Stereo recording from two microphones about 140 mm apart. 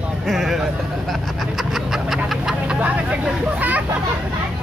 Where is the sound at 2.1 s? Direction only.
5° right (ahead or behind).